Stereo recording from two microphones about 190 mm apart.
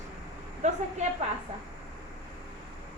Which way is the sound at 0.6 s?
40° right (ahead or behind).